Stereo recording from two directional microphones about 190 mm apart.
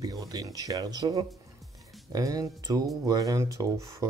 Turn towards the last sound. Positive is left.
turn(degrees=-15)  # may be behind; listen again after turning